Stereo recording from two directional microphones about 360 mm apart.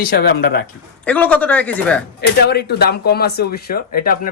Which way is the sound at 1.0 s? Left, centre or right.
Centre.